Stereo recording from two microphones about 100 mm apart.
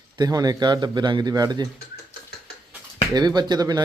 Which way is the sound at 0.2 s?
40° right (ahead or behind).